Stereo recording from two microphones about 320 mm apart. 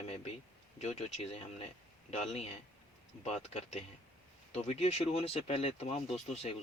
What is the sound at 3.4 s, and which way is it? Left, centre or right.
Speech, left.